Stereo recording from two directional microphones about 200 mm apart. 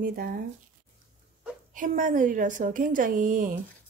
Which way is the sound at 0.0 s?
45° right (ahead or behind).